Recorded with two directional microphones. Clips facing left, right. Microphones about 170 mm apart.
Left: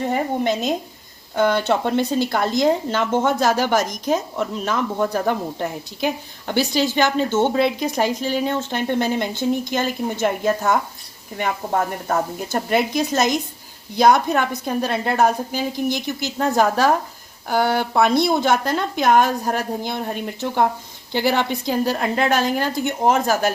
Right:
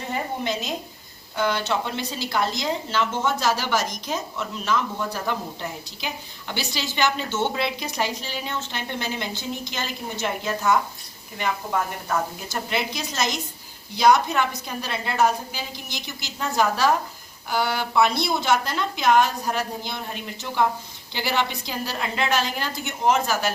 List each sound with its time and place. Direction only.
0.1 s speech: 50° left (ahead or behind)